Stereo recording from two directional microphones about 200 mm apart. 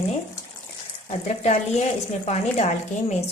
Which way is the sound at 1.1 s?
35° left (ahead or behind).